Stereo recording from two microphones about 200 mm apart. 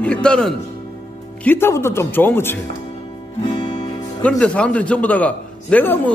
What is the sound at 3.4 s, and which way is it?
Music, 25° left (ahead or behind).